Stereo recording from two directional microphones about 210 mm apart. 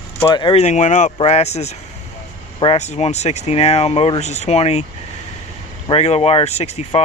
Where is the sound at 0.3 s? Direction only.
20° left (ahead or behind).